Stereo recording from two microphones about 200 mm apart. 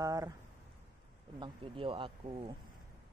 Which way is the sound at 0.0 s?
15° right (ahead or behind).